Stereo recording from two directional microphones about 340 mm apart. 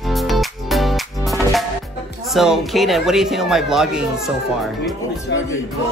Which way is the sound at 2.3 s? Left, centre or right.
Centre.